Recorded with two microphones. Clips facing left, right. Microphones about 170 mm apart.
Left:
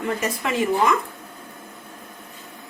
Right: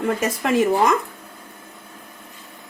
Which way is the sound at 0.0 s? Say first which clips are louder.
Right 3 dB; 45° right (ahead or behind).